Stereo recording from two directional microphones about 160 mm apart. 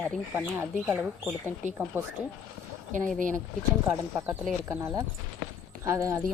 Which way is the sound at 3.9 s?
15° right (ahead or behind).